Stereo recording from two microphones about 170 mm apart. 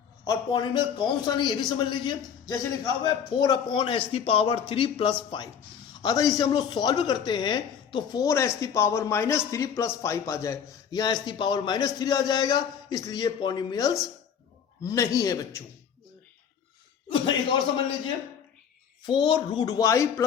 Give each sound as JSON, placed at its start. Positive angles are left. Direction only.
{"t": 0.3, "sound": "a woman's voice", "side_deg": 25}
{"t": 19.0, "sound": "a woman's voice", "side_deg": 25}